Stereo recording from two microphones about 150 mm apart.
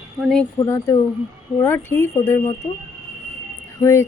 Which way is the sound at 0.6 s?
20° left (ahead or behind).